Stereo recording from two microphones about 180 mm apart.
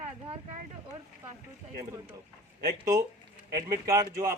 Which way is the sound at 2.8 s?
20° right (ahead or behind).